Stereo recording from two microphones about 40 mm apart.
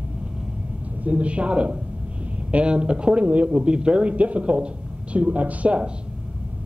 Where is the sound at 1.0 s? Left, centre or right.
Right.